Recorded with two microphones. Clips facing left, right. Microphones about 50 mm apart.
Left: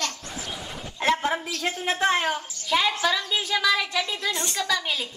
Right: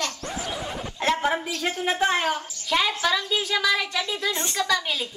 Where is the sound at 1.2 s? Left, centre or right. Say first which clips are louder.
Right 1 dB; centre.